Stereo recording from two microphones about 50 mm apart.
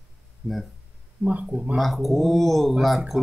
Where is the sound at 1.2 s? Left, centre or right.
Right.